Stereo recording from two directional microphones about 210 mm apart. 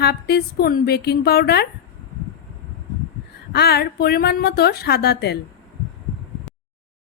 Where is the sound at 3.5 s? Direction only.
50° left (ahead or behind).